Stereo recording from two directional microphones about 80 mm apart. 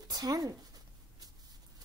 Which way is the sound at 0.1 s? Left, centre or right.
Right.